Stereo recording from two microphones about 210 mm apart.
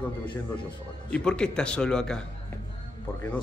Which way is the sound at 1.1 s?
5° left (ahead or behind).